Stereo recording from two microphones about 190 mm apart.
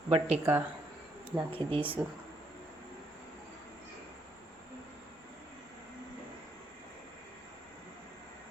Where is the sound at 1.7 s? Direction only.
25° right (ahead or behind).